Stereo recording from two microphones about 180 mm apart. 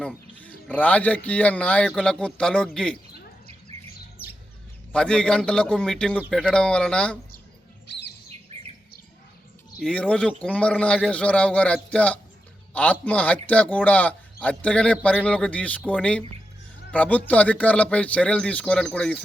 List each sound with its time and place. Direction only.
0.3 s a man's voice: 10° left (ahead or behind)
4.9 s a man's voice: 5° left (ahead or behind)
7.9 s bird: 75° left (ahead or behind)
9.8 s a man's voice: 5° left (ahead or behind)